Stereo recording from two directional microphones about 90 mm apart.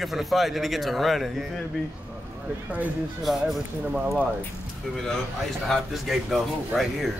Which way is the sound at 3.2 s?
Centre (ahead or behind).